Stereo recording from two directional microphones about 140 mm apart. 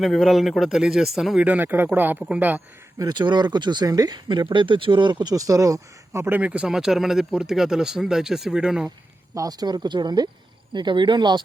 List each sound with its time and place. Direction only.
0.0 s speech: centre (ahead or behind)
3.0 s speech: 30° right (ahead or behind); by 8.9 s 5° right (ahead or behind)
9.3 s speech: 25° right (ahead or behind)